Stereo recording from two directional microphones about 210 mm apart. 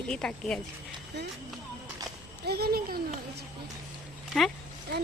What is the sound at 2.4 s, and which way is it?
A woman's voice, 50° right (ahead or behind).